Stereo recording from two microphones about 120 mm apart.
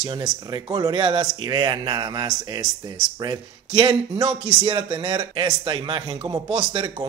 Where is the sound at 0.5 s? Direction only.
40° right (ahead or behind).